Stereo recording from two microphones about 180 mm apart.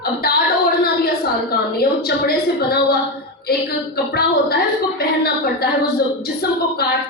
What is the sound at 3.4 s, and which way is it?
Speech, 60° left (ahead or behind).